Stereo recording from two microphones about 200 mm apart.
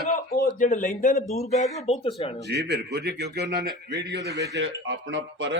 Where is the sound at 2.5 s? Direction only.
60° right (ahead or behind).